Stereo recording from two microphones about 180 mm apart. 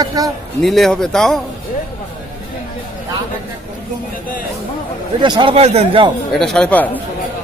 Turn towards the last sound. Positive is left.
turn(degrees=10)  # may be behind; listen again after turning